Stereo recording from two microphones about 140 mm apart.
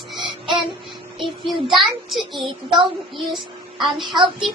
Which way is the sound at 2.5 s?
35° right (ahead or behind).